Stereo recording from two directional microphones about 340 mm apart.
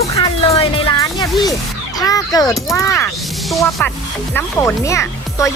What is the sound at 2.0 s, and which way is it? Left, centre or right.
Speech, centre.